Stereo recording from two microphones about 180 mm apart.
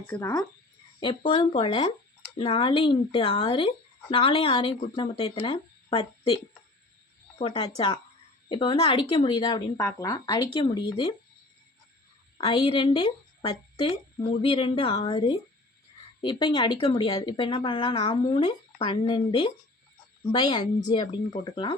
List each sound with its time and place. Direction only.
0.1 s speech: 15° left (ahead or behind)
0.9 s a woman's voice: 25° left (ahead or behind)
12.4 s a woman's voice: 30° left (ahead or behind)